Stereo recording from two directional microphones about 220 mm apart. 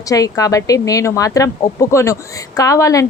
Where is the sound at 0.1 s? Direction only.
15° left (ahead or behind).